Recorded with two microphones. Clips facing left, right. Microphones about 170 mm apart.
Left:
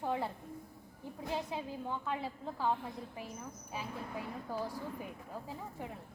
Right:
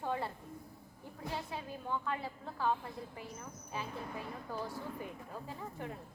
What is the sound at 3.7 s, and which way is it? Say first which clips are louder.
Speech: right 1 dB; 10° left (ahead or behind).